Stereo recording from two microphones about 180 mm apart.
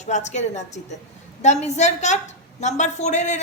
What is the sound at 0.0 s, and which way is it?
A woman's voice, 40° left (ahead or behind).